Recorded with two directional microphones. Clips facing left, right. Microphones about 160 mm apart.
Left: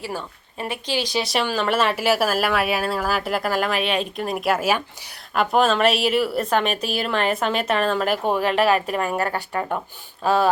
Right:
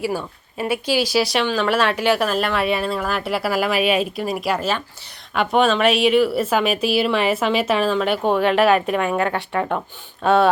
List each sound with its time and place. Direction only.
0.0 s a woman's voice: 10° right (ahead or behind)
8.4 s speech: 30° left (ahead or behind)
10.2 s speech: 30° right (ahead or behind)